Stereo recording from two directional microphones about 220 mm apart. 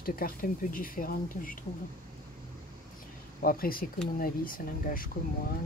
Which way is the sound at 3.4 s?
40° left (ahead or behind).